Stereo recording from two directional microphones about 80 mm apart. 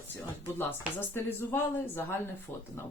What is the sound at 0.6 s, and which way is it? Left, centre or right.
A woman's voice, left.